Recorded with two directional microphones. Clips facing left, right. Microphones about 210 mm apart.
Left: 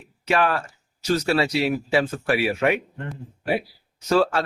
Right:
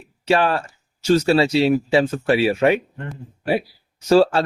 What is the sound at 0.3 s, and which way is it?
Speech, 30° right (ahead or behind).